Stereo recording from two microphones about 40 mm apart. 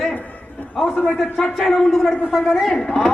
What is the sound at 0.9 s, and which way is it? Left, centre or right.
Speech, left.